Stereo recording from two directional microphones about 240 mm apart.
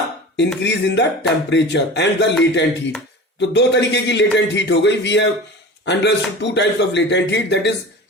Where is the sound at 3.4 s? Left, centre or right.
Left.